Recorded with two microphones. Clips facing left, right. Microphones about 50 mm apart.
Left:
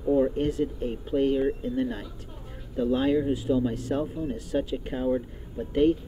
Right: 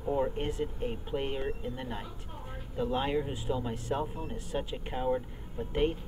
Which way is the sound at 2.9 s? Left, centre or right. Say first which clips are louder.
Left 8 dB; centre.